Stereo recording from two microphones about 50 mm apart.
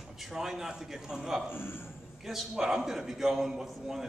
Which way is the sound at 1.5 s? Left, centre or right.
Left.